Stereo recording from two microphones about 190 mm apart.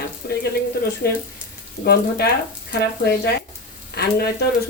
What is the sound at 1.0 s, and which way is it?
Speech, 55° left (ahead or behind).